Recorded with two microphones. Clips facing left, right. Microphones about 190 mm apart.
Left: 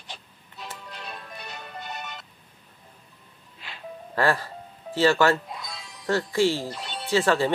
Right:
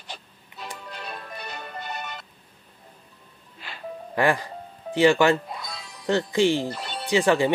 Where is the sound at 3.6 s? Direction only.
Centre (ahead or behind).